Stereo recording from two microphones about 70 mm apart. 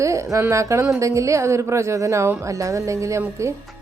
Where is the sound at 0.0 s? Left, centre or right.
Right.